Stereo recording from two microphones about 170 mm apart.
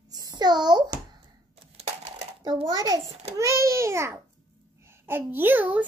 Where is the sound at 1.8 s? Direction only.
40° right (ahead or behind).